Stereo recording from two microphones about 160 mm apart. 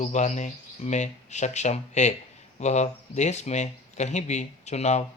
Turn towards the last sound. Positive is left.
turn(degrees=45)  # may be behind; listen again after turning